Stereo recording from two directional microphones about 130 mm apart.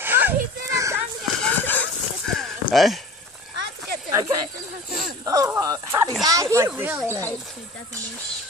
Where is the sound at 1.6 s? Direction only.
15° left (ahead or behind).